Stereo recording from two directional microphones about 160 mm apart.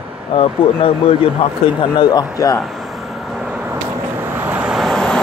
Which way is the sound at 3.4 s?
10° right (ahead or behind).